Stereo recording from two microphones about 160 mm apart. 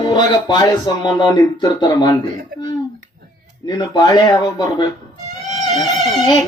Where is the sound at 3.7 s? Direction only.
25° left (ahead or behind).